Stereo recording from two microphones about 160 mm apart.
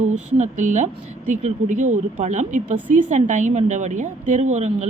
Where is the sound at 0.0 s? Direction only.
50° right (ahead or behind).